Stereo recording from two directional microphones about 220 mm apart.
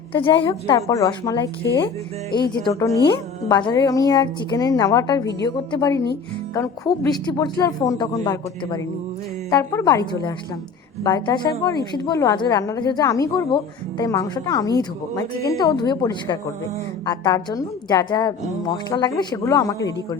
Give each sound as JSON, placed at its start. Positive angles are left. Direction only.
{"t": 0.1, "sound": "a woman's voice", "side_deg": 20}
{"t": 2.5, "sound": "a woman's voice", "side_deg": 15}